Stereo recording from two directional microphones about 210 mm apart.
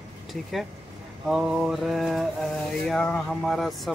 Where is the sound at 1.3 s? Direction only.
Centre (ahead or behind).